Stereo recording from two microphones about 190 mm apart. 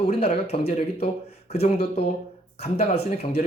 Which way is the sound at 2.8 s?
60° left (ahead or behind).